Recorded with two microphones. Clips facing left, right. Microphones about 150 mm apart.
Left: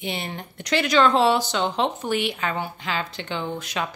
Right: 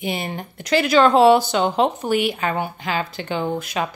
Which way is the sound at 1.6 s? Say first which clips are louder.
Right 5 dB; 45° right (ahead or behind).